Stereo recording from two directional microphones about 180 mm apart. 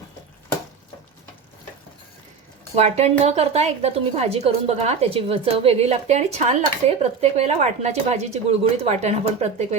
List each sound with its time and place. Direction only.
2.7 s a woman's voice: 35° right (ahead or behind)